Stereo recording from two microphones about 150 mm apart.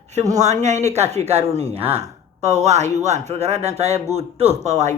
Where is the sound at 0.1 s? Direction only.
50° right (ahead or behind).